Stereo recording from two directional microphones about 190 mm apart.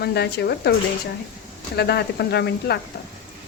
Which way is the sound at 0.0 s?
60° left (ahead or behind).